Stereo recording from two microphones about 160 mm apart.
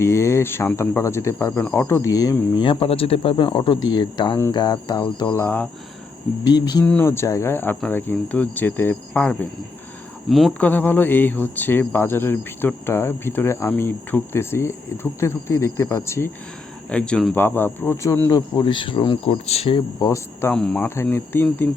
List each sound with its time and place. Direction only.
0.0 s speech: 15° left (ahead or behind)
6.5 s speech: 25° left (ahead or behind)
6.8 s cricket: 10° left (ahead or behind)
10.2 s speech: centre (ahead or behind)
10.7 s cricket: 10° left (ahead or behind)
16.9 s speech: 5° left (ahead or behind); by 19.8 s 40° left (ahead or behind)
20.0 s speech: 20° left (ahead or behind)
20.5 s cricket: 5° left (ahead or behind)